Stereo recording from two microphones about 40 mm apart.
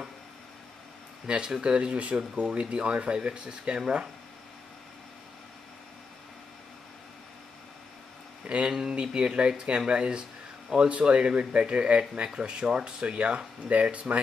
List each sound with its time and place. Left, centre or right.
1.2 s speech: right
8.5 s speech: right